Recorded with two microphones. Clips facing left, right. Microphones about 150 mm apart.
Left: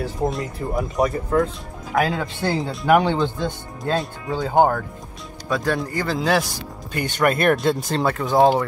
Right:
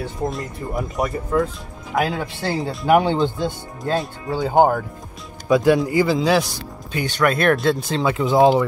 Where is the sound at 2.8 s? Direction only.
15° right (ahead or behind).